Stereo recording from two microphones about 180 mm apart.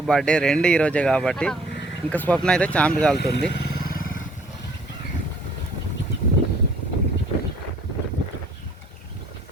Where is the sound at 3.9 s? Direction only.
50° left (ahead or behind).